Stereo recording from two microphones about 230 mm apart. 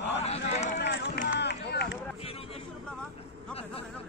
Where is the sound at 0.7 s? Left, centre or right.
Left.